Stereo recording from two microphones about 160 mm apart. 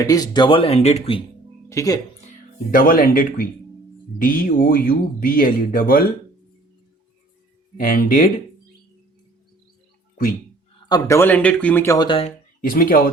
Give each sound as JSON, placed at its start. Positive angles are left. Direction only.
{"t": 0.0, "sound": "speech", "side_deg": 25}
{"t": 1.7, "sound": "speech", "side_deg": 20}
{"t": 2.7, "sound": "speech", "side_deg": 60}
{"t": 7.8, "sound": "speech", "side_deg": 60}
{"t": 10.8, "sound": "speech", "side_deg": 20}
{"t": 11.9, "sound": "speech", "side_deg": 30}
{"t": 12.6, "sound": "speech", "side_deg": 65}